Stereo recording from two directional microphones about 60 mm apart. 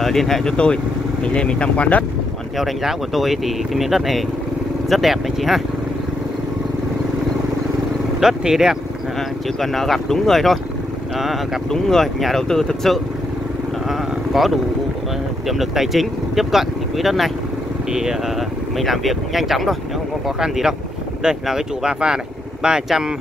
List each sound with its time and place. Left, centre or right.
0.0 s speech: centre; by 2.0 s left
2.6 s speech: centre
8.2 s speech: centre
9.6 s speech: centre
11.7 s speech: centre
13.8 s a sound: centre
15.4 s speech: centre
18.8 s speech: centre